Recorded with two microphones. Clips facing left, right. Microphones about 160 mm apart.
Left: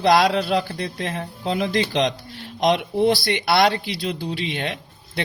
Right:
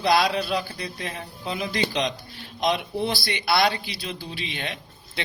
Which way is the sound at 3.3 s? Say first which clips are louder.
Left 4 dB; 55° left (ahead or behind).